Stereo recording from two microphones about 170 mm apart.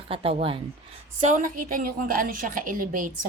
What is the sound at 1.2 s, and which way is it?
A woman's voice, 50° right (ahead or behind).